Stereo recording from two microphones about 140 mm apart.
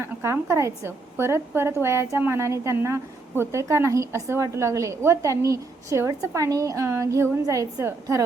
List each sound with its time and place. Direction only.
0.0 s a woman's voice: 20° right (ahead or behind)